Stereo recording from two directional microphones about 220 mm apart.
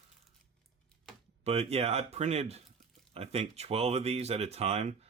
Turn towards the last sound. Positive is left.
turn(degrees=-30)  # may be behind; listen again after turning